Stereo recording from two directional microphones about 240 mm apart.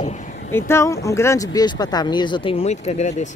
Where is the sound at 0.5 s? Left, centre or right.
Centre.